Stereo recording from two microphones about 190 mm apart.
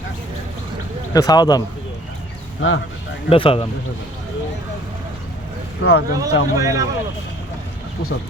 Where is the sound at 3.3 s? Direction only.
30° left (ahead or behind).